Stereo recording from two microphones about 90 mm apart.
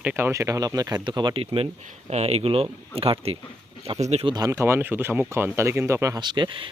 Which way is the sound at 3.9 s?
65° right (ahead or behind).